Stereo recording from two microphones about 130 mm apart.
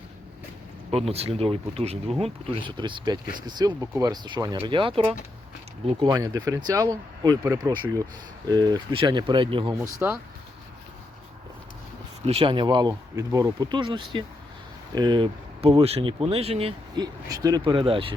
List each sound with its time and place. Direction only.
0.9 s speech: 50° right (ahead or behind)
2.2 s speech: 40° right (ahead or behind)
6.1 s speech: 30° right (ahead or behind)
10.0 s speech: 15° right (ahead or behind)
12.2 s speech: 45° right (ahead or behind)
16.9 s speech: 30° right (ahead or behind)
17.6 s speech: 40° right (ahead or behind)